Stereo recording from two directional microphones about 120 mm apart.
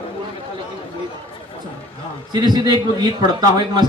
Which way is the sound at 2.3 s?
35° right (ahead or behind).